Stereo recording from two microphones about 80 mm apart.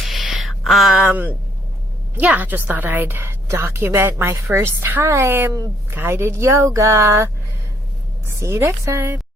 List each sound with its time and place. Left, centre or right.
0.0 s a sound: centre
1.1 s a woman's voice: right
8.4 s speech: right